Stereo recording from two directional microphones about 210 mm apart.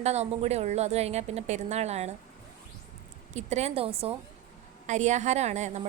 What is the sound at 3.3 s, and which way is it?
A woman's voice, 30° right (ahead or behind).